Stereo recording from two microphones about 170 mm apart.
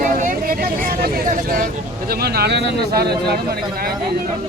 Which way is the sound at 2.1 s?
70° right (ahead or behind).